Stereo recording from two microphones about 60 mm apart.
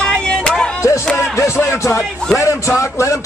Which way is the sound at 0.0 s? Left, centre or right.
Centre.